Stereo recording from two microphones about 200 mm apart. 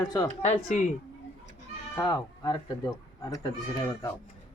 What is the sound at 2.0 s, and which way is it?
Speech, 20° left (ahead or behind).